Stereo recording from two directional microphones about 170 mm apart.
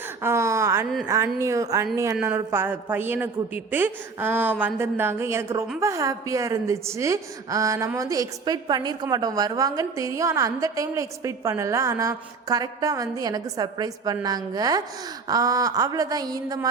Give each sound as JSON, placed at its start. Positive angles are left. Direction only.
{"t": 0.2, "sound": "a woman's voice", "side_deg": -15}